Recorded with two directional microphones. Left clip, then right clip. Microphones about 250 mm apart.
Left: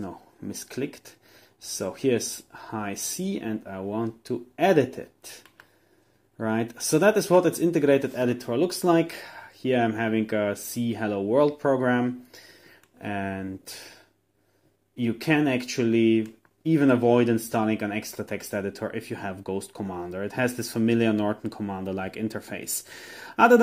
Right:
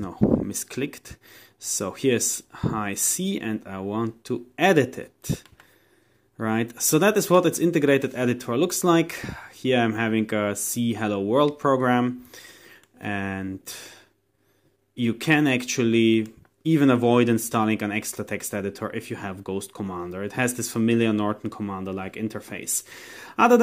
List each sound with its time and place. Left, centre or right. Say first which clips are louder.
0.7 s speech: right 2 dB; right
6.3 s speech: right 1 dB; centre
15.0 s speech: right 2 dB; centre